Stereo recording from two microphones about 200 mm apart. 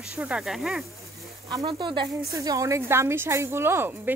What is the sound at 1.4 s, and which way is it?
A woman's voice, 20° right (ahead or behind).